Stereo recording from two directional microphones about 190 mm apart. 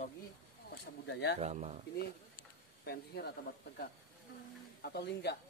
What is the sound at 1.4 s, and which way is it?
Speech, 35° right (ahead or behind).